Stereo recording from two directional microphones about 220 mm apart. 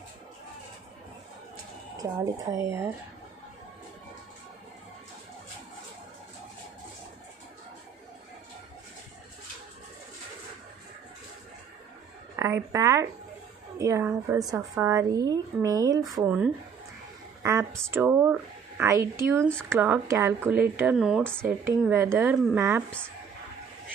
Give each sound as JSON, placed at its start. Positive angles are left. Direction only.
{"t": 2.0, "sound": "a woman's voice", "side_deg": -15}
{"t": 12.4, "sound": "a woman's voice", "side_deg": -15}
{"t": 17.4, "sound": "a sound", "side_deg": -15}
{"t": 17.8, "sound": "a woman's voice", "side_deg": -10}